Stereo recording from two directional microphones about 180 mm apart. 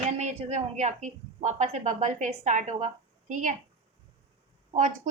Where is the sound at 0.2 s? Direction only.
40° right (ahead or behind).